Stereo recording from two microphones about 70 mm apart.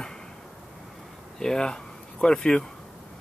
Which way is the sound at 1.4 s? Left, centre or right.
Centre.